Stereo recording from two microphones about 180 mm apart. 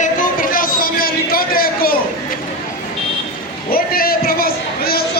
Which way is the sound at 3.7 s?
55° left (ahead or behind).